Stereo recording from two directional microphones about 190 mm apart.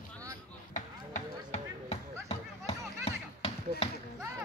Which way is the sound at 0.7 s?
40° left (ahead or behind).